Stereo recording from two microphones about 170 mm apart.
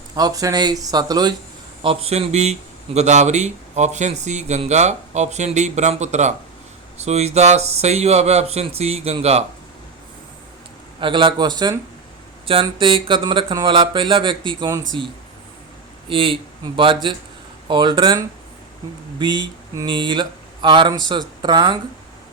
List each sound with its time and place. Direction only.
0.2 s speech: 20° right (ahead or behind)
1.8 s speech: 35° right (ahead or behind)
11.0 s speech: 30° right (ahead or behind)
19.2 s speech: 25° right (ahead or behind)